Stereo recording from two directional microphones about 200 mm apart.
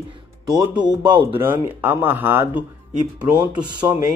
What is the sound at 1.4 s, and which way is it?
Speech, 10° right (ahead or behind).